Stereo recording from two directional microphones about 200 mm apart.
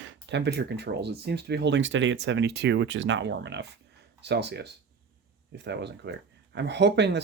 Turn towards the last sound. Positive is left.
turn(degrees=-60)  # may be behind; listen again after turning